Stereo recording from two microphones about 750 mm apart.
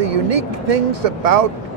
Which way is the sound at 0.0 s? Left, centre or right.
Right.